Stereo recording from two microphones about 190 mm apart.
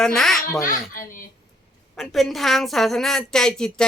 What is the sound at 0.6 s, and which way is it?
Speech, 45° left (ahead or behind).